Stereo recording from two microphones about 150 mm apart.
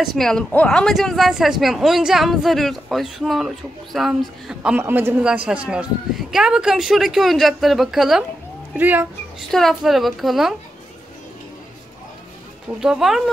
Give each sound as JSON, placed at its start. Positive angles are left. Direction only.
{"t": 0.0, "sound": "speech", "side_deg": 0}
{"t": 9.5, "sound": "speech", "side_deg": 0}
{"t": 12.8, "sound": "speech", "side_deg": -5}